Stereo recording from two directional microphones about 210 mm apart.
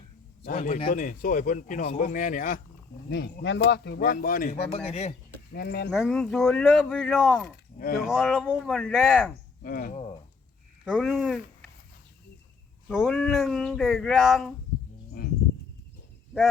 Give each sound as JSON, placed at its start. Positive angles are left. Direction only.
{"t": 0.4, "sound": "speech", "side_deg": 35}
{"t": 3.1, "sound": "speech", "side_deg": 55}
{"t": 4.5, "sound": "speech", "side_deg": 30}
{"t": 5.5, "sound": "speech", "side_deg": 50}
{"t": 5.9, "sound": "speech", "side_deg": 0}
{"t": 7.4, "sound": "speech", "side_deg": 45}
{"t": 8.0, "sound": "speech", "side_deg": 0}
{"t": 9.6, "sound": "speech", "side_deg": 45}
{"t": 10.8, "sound": "speech", "side_deg": 0}
{"t": 12.9, "sound": "speech", "side_deg": 0}